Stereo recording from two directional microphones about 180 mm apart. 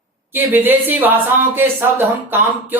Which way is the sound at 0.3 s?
10° right (ahead or behind).